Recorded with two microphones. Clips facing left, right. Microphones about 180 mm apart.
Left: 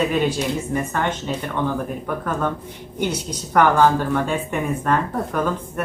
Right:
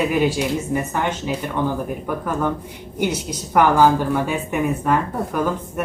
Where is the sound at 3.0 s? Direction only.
10° right (ahead or behind).